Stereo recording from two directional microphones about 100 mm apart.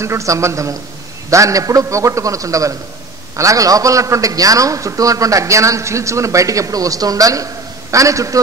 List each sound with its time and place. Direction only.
0.0 s a man's voice: 30° right (ahead or behind)